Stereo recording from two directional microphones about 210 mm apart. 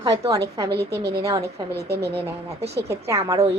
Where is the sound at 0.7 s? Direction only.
50° right (ahead or behind).